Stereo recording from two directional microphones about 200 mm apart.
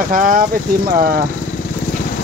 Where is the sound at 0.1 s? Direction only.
40° right (ahead or behind).